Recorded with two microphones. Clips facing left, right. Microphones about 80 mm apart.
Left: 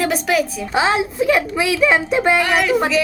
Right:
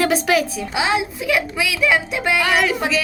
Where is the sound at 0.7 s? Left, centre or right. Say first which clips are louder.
Left 3 dB; left.